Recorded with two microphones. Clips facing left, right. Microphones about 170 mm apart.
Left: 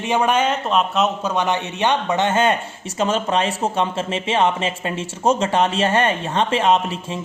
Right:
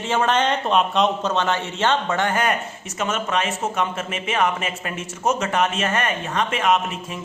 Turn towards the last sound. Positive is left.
turn(degrees=30)  # may be behind; listen again after turning